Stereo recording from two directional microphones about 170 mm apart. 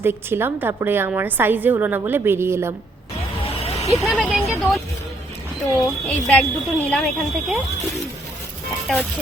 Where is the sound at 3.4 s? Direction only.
35° left (ahead or behind).